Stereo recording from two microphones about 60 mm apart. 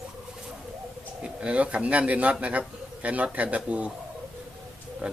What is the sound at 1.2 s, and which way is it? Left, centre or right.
Speech, centre.